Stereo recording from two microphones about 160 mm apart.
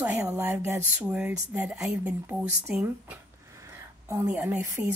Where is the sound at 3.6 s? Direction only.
15° right (ahead or behind).